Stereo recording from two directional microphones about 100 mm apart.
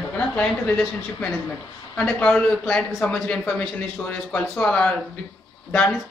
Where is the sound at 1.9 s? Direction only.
10° left (ahead or behind).